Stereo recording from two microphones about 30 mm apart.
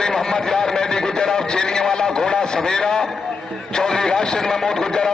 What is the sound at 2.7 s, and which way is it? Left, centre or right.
Speech, left.